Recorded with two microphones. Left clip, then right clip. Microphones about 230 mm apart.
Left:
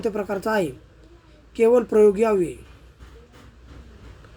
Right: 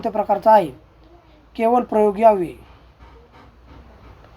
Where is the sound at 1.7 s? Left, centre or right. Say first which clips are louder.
Left 1 dB; centre.